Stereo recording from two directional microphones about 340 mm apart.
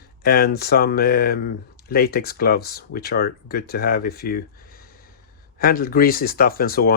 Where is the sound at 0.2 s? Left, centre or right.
Left.